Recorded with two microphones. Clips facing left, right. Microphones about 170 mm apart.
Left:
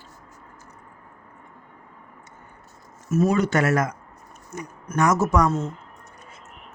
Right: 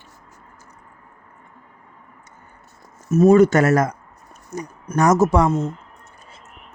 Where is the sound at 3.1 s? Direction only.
45° right (ahead or behind).